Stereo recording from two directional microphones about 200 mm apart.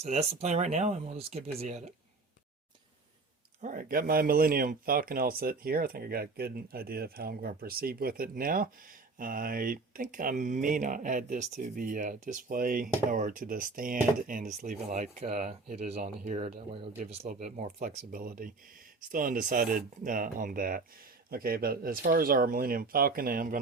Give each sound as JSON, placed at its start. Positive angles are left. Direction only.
{"t": 0.0, "sound": "speech", "side_deg": -30}
{"t": 3.6, "sound": "speech", "side_deg": -45}